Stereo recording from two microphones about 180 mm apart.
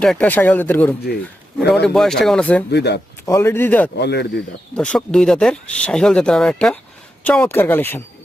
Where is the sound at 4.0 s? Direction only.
70° left (ahead or behind).